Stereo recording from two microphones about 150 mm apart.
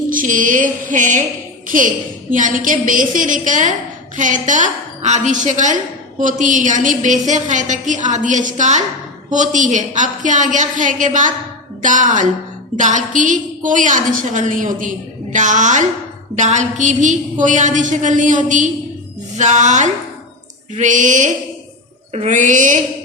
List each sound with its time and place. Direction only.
0.1 s a woman's voice: 65° right (ahead or behind)